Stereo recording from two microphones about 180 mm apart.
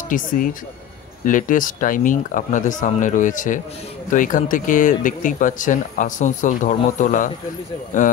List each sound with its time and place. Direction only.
0.1 s speech: 50° left (ahead or behind)